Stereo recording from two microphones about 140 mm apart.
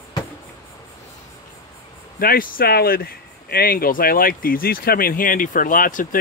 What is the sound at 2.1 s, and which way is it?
Speech, 90° left.